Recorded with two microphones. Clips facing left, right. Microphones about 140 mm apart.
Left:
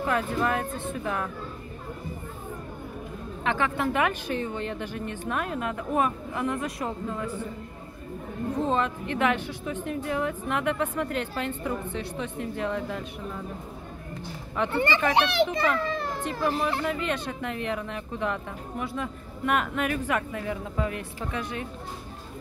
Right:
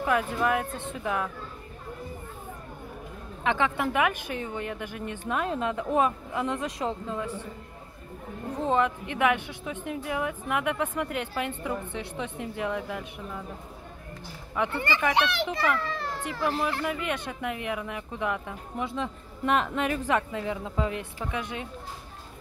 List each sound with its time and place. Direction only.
0.0 s a woman's voice: 15° right (ahead or behind)
3.4 s a woman's voice: 20° right (ahead or behind)
8.6 s a woman's voice: 15° right (ahead or behind)
14.7 s a child's voice: 25° left (ahead or behind)
16.8 s speech: 15° right (ahead or behind)